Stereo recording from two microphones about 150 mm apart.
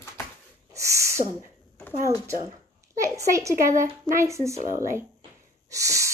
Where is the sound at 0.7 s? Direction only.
20° right (ahead or behind).